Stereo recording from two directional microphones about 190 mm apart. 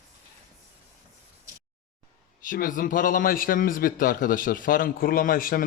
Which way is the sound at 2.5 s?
45° left (ahead or behind).